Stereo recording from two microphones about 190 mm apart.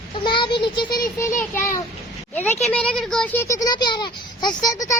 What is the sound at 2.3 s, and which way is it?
Speech, 10° left (ahead or behind).